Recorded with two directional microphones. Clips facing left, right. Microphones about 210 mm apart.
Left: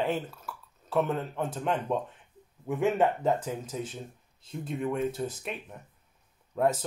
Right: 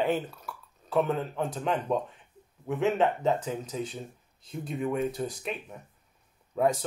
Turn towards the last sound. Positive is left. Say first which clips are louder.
# right 1 dB
turn(degrees=5)  # may be behind; listen again after turning